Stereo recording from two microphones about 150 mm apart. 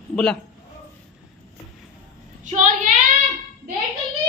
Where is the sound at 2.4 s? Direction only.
55° right (ahead or behind).